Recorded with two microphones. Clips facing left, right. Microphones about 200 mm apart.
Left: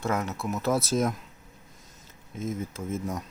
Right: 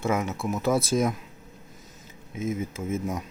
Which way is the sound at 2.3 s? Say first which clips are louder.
Right 3 dB; 5° right (ahead or behind).